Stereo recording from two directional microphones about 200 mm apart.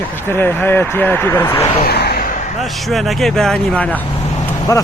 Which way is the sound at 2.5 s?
Centre (ahead or behind).